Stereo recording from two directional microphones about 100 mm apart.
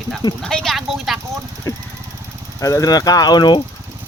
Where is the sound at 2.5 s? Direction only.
30° left (ahead or behind).